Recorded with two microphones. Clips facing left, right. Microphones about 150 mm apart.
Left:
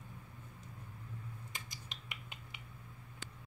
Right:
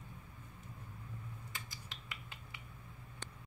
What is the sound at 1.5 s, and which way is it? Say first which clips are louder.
Finger snapping: even; 20° left (ahead or behind).